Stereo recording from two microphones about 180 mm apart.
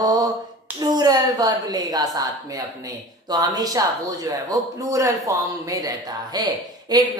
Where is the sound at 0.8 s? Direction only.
20° right (ahead or behind).